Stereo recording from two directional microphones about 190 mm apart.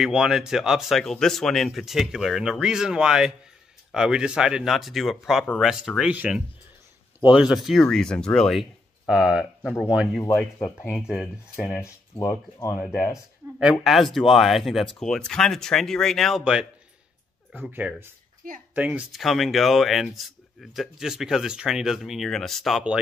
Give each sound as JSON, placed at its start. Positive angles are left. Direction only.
{"t": 0.0, "sound": "speech", "side_deg": -5}
{"t": 10.2, "sound": "speech", "side_deg": 10}
{"t": 10.9, "sound": "speech", "side_deg": 0}
{"t": 11.7, "sound": "speech", "side_deg": 15}
{"t": 12.7, "sound": "speech", "side_deg": 0}
{"t": 18.4, "sound": "a woman's voice", "side_deg": -50}
{"t": 18.8, "sound": "speech", "side_deg": -5}